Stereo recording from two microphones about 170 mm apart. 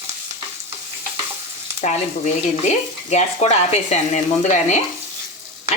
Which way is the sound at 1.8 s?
45° left (ahead or behind).